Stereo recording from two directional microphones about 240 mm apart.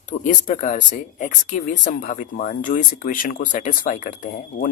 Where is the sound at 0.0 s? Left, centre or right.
Left.